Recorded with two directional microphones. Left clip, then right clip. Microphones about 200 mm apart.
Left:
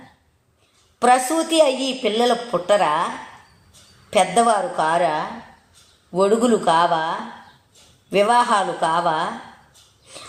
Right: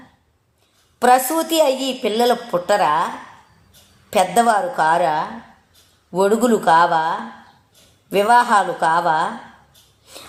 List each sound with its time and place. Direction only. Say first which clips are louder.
0.9 s a woman's voice: right 2 dB; 35° right (ahead or behind)
4.1 s a woman's voice: right 1 dB; 40° right (ahead or behind)